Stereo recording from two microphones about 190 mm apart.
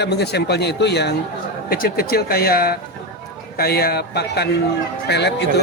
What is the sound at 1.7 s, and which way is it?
A man's voice, 50° left (ahead or behind).